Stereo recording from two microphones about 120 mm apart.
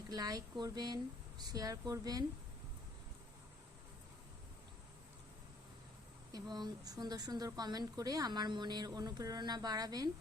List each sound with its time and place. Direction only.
0.1 s a woman's voice: 30° right (ahead or behind)
6.3 s a woman's voice: 35° right (ahead or behind)